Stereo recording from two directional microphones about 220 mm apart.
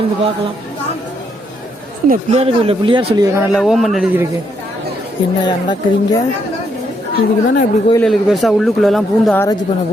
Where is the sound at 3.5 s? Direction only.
Centre (ahead or behind).